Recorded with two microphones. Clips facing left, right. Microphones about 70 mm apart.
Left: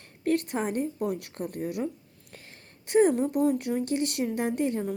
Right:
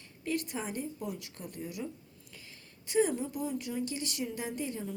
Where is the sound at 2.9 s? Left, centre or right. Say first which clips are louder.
Left 8 dB; left.